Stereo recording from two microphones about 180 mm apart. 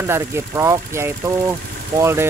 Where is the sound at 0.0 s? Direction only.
15° right (ahead or behind).